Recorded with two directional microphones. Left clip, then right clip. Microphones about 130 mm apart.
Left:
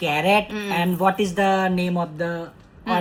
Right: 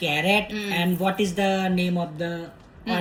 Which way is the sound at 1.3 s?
15° right (ahead or behind).